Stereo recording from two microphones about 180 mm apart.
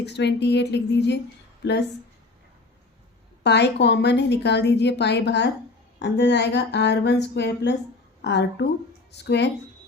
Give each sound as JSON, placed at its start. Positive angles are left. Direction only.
{"t": 0.0, "sound": "a woman's voice", "side_deg": 70}
{"t": 3.4, "sound": "a woman's voice", "side_deg": 70}